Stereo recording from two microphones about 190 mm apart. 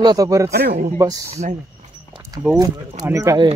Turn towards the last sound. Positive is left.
turn(degrees=-15)  # may be behind; listen again after turning